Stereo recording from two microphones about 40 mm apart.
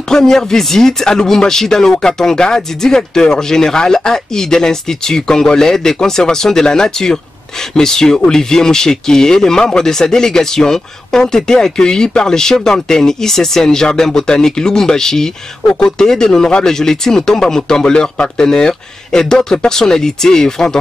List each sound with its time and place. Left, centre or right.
0.1 s speech: centre